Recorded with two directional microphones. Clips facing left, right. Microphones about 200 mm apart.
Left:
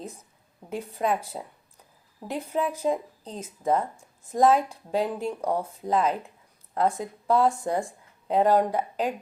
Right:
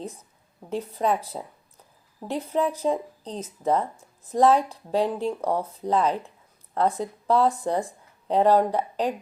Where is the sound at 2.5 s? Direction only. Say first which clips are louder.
Right 2 dB; 35° right (ahead or behind).